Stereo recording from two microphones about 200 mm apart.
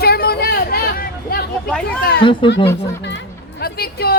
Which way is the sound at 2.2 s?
25° left (ahead or behind).